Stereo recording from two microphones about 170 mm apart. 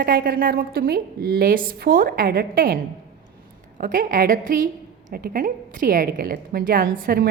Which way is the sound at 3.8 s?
55° right (ahead or behind).